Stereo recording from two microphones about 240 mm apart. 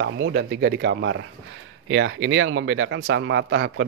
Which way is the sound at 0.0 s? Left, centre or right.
Right.